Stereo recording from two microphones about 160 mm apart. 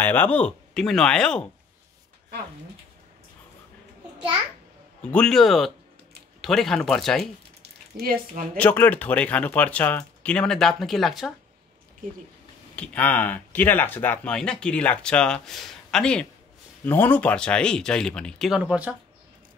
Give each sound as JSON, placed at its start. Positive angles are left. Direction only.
{"t": 0.0, "sound": "speech", "side_deg": 10}
{"t": 5.0, "sound": "speech", "side_deg": 5}
{"t": 7.6, "sound": "a sound", "side_deg": -85}
{"t": 8.5, "sound": "speech", "side_deg": 10}
{"t": 12.7, "sound": "speech", "side_deg": 10}